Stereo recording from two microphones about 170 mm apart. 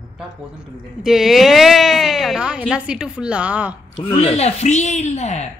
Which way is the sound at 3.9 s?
35° left (ahead or behind).